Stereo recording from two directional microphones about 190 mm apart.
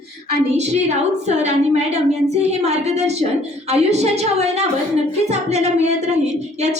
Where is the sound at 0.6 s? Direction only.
35° right (ahead or behind).